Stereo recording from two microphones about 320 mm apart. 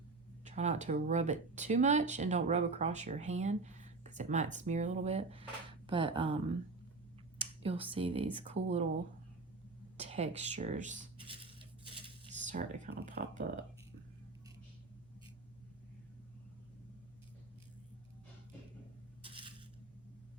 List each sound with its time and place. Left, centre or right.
0.4 s speech: right
10.1 s speech: centre
19.2 s coin: centre